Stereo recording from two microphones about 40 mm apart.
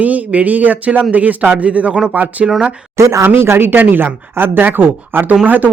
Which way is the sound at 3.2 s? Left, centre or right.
Right.